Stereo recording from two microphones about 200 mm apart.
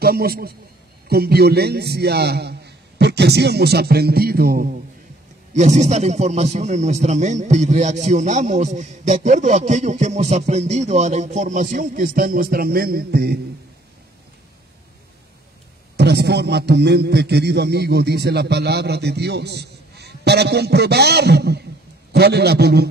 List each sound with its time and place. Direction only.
0.0 s a man's voice: 50° right (ahead or behind)
5.5 s a man's voice: 35° right (ahead or behind); by 13.4 s 50° right (ahead or behind)
16.0 s a man's voice: 55° right (ahead or behind)